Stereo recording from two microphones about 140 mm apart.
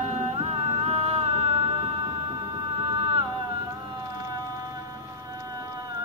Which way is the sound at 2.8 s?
40° right (ahead or behind).